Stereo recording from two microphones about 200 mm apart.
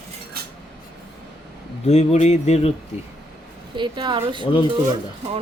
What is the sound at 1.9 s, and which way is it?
Speech, 35° left (ahead or behind).